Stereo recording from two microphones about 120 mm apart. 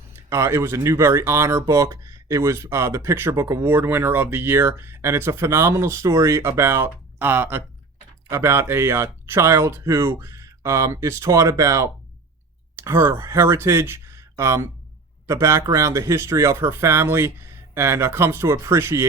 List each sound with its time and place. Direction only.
0.3 s speech: 25° right (ahead or behind)